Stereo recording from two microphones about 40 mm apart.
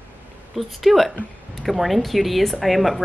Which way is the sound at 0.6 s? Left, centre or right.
Centre.